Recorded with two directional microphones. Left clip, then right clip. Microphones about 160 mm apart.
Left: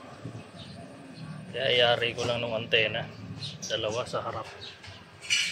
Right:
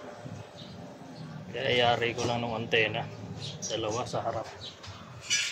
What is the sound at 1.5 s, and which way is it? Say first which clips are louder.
Speech: left 2 dB; 20° right (ahead or behind).